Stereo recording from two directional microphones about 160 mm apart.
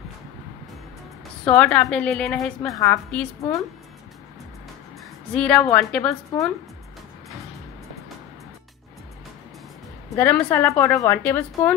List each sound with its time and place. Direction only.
1.4 s a woman's voice: 5° left (ahead or behind)
2.6 s a woman's voice: 20° left (ahead or behind)
3.1 s a woman's voice: 10° left (ahead or behind)
5.3 s a woman's voice: 5° left (ahead or behind)
10.1 s a woman's voice: 15° left (ahead or behind)